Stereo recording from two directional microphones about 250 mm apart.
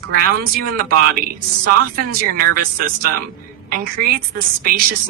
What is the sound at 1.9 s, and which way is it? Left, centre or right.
A woman's voice, right.